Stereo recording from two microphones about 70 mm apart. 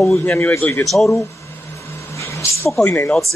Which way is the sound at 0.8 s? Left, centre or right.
Centre.